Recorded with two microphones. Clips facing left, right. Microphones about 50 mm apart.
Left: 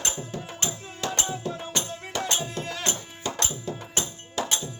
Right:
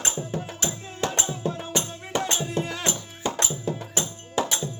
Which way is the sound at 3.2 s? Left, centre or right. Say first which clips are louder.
Right 3 dB; right.